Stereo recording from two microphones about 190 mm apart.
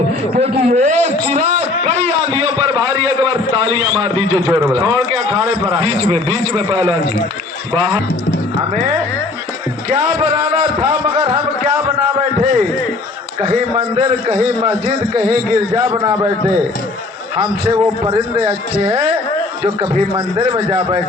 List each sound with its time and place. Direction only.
0.3 s a man's voice: 35° right (ahead or behind)
11.3 s a man's voice: 40° right (ahead or behind)
13.7 s a man's voice: 30° right (ahead or behind)
17.3 s a man's voice: 25° right (ahead or behind)